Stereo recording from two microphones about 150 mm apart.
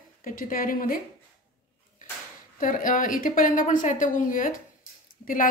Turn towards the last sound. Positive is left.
turn(degrees=65)  # may be behind; listen again after turning